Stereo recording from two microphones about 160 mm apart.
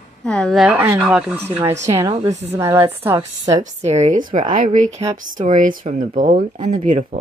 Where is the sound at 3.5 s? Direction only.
45° right (ahead or behind).